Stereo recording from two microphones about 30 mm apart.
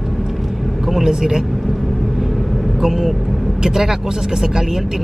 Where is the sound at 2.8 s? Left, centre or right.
Centre.